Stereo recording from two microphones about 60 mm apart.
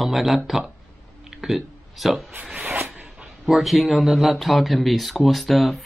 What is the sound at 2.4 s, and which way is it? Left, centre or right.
Zipper, right.